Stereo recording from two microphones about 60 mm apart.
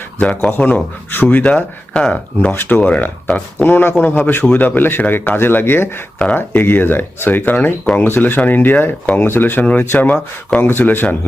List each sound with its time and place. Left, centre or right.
0.2 s speech: left
1.9 s speech: centre
2.5 s speech: left